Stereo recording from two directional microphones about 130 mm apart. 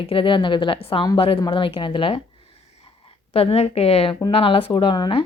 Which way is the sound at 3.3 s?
50° left (ahead or behind).